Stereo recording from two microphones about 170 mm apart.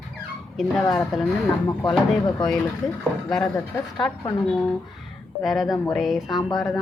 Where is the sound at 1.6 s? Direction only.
25° left (ahead or behind).